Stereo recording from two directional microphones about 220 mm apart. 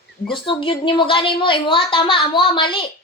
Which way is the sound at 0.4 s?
25° left (ahead or behind).